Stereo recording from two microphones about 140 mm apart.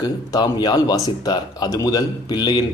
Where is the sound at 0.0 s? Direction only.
30° left (ahead or behind).